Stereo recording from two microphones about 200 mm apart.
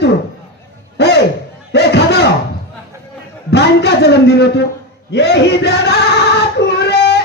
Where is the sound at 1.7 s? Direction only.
55° left (ahead or behind).